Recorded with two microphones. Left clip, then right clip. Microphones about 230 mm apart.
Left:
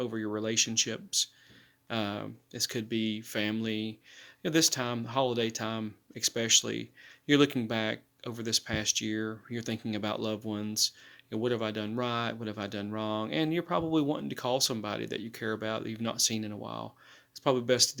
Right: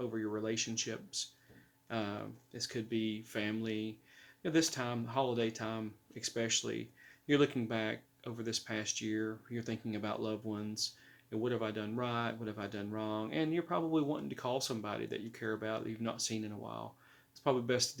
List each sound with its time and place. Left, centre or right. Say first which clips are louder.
0.0 s speech: left 5 dB; left